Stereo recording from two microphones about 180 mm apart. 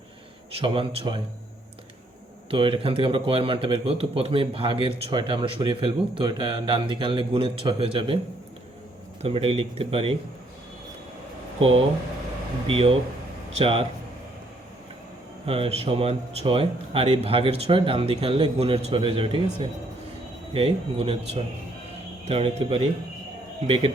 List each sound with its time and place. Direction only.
0.5 s speech: 30° right (ahead or behind)
2.5 s speech: 30° right (ahead or behind)
9.2 s speech: 30° right (ahead or behind)
12.6 s speech: 30° right (ahead or behind)
15.4 s speech: 35° right (ahead or behind)